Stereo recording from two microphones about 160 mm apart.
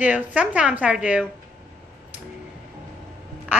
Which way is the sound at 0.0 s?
10° right (ahead or behind).